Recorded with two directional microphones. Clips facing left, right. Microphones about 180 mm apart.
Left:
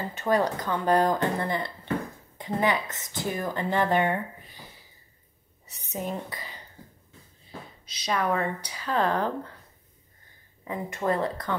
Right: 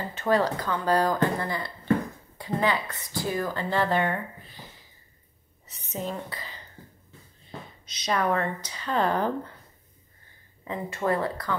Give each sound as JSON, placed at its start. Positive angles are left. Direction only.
{"t": 0.1, "sound": "a woman's voice", "side_deg": 15}
{"t": 5.7, "sound": "a woman's voice", "side_deg": 15}
{"t": 8.0, "sound": "speech", "side_deg": 5}
{"t": 10.7, "sound": "a woman's voice", "side_deg": 15}